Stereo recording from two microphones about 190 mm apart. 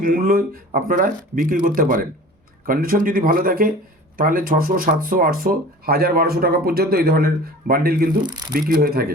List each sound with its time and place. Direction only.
0.0 s speech: 50° right (ahead or behind)